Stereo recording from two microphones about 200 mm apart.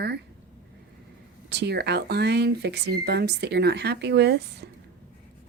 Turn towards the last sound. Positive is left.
turn(degrees=-55)  # may be behind; listen again after turning